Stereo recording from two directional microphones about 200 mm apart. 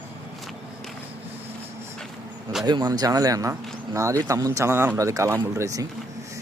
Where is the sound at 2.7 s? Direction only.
20° right (ahead or behind).